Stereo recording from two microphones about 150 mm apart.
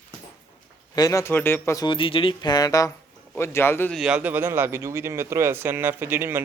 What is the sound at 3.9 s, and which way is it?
A man's voice, 5° right (ahead or behind).